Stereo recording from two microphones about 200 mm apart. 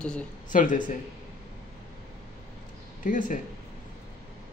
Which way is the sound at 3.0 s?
40° left (ahead or behind).